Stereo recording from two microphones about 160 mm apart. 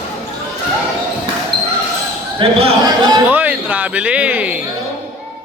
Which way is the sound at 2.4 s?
35° right (ahead or behind).